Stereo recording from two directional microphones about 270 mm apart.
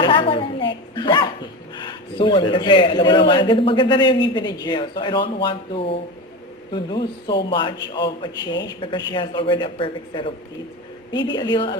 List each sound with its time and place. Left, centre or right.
0.0 s a woman's voice: centre
5.4 s a sound: centre
6.7 s a man's voice: centre